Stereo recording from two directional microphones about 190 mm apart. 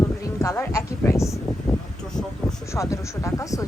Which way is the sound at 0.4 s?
15° left (ahead or behind).